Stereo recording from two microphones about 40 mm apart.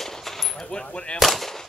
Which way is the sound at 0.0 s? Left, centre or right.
Centre.